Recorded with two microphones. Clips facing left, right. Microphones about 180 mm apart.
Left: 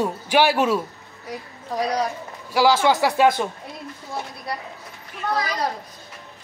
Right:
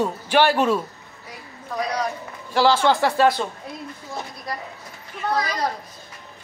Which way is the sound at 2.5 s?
10° left (ahead or behind).